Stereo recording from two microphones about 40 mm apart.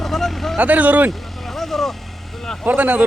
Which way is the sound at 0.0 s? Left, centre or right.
Centre.